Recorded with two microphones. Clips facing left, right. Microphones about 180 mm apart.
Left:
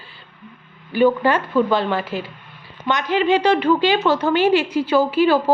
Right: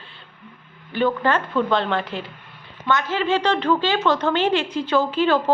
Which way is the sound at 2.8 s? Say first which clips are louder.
Left 3 dB; 15° left (ahead or behind).